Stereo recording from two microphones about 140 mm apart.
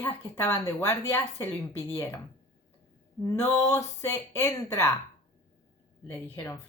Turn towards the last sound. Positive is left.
turn(degrees=15)  # may be behind; listen again after turning